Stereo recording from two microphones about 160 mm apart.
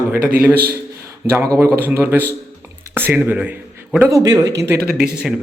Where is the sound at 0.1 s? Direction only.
65° right (ahead or behind).